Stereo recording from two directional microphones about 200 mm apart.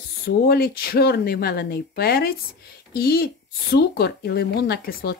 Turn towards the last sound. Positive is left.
turn(degrees=55)  # may be behind; listen again after turning